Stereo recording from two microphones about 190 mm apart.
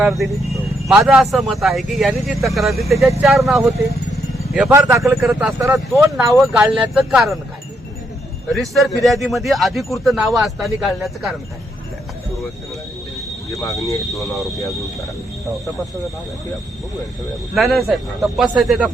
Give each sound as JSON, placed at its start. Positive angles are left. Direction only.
{"t": 0.0, "sound": "speech", "side_deg": 0}
{"t": 4.1, "sound": "vehicle", "side_deg": 0}
{"t": 4.7, "sound": "speech", "side_deg": -15}
{"t": 5.5, "sound": "speech", "side_deg": -15}
{"t": 8.5, "sound": "speech", "side_deg": 0}
{"t": 13.5, "sound": "speech", "side_deg": 15}
{"t": 14.1, "sound": "speech", "side_deg": 0}
{"t": 17.5, "sound": "speech", "side_deg": 0}